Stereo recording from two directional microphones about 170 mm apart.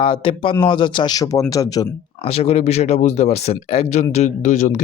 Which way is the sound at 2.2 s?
35° left (ahead or behind).